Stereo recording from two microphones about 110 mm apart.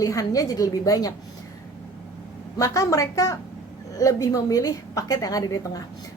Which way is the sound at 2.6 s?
30° left (ahead or behind).